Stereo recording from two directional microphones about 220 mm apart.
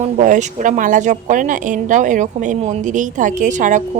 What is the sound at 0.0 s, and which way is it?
A woman's voice, 35° right (ahead or behind).